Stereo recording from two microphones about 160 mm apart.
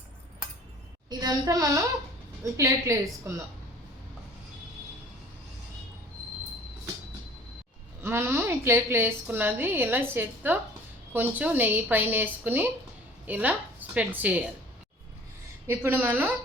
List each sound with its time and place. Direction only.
1.2 s a woman's voice: 25° right (ahead or behind)
8.0 s a woman's voice: 15° right (ahead or behind)
15.6 s a woman's voice: 15° right (ahead or behind)